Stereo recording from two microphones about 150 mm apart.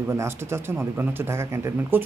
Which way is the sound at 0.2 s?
15° right (ahead or behind).